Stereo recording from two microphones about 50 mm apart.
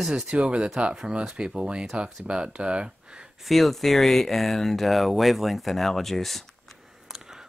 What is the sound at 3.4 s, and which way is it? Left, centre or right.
Speech, centre.